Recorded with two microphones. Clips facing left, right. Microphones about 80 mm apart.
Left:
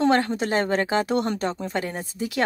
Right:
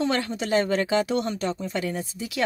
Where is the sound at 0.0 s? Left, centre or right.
Left.